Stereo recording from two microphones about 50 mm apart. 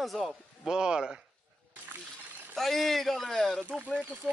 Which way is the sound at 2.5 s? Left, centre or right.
Centre.